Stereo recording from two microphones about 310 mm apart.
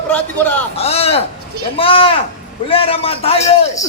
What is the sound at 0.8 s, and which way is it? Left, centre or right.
A man's voice, centre.